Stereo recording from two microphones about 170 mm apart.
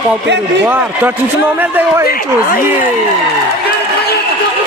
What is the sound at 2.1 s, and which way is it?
Speech, 55° left (ahead or behind).